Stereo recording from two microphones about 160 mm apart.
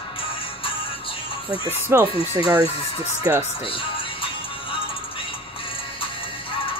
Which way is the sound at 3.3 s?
15° right (ahead or behind).